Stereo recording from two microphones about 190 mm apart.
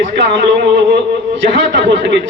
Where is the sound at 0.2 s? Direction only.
65° right (ahead or behind).